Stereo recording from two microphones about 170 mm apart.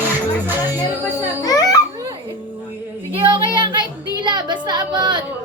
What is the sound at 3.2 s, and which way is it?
Child singing, 25° right (ahead or behind).